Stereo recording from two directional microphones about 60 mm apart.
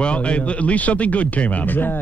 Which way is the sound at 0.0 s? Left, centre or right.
Centre.